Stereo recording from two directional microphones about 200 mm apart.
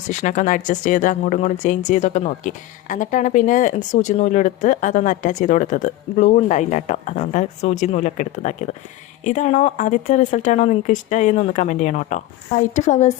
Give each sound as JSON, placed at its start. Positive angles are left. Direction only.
{"t": 0.1, "sound": "speech", "side_deg": 40}